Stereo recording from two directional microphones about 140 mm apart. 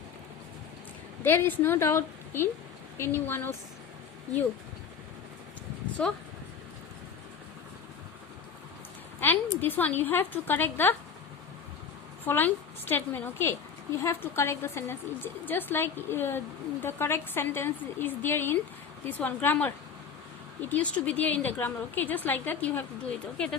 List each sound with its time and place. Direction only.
1.2 s a woman's voice: 15° left (ahead or behind)
6.0 s a woman's voice: 10° left (ahead or behind)
9.2 s a woman's voice: 15° left (ahead or behind)
12.2 s a woman's voice: 15° left (ahead or behind)